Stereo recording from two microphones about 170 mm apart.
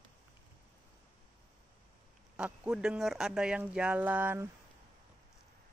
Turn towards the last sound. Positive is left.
turn(degrees=-10)  # may be behind; listen again after turning